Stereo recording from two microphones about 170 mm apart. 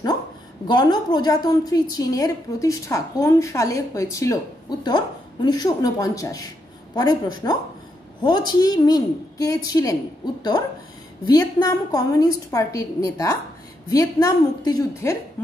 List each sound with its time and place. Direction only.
0.7 s a woman's voice: 25° left (ahead or behind)